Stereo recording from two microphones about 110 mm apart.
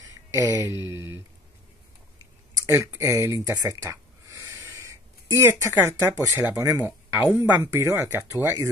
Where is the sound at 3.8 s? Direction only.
25° right (ahead or behind).